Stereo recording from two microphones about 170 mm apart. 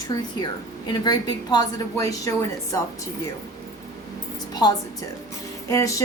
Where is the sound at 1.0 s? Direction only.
25° left (ahead or behind).